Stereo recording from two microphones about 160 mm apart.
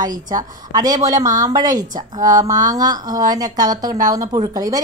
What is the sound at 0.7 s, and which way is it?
A woman's voice, 25° right (ahead or behind).